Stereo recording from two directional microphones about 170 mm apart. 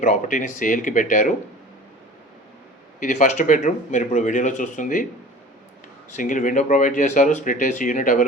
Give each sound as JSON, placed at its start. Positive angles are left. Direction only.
{"t": 0.0, "sound": "speech", "side_deg": 50}
{"t": 3.0, "sound": "speech", "side_deg": 45}
{"t": 6.1, "sound": "speech", "side_deg": 45}